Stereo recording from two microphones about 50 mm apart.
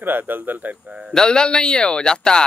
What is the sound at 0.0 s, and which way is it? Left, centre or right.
Speech, right.